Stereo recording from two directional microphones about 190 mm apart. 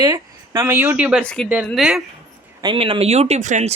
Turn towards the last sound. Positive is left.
turn(degrees=-40)  # may be behind; listen again after turning